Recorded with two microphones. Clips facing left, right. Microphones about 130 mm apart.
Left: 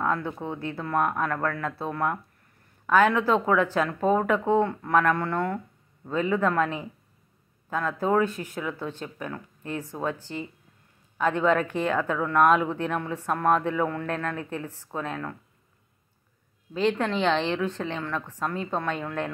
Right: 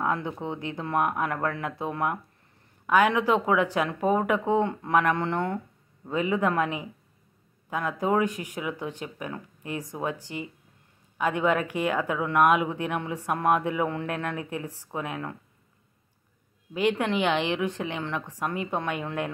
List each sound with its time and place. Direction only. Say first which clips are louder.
0.0 s speech: left 1 dB; 15° right (ahead or behind)
16.7 s speech: even; 15° right (ahead or behind)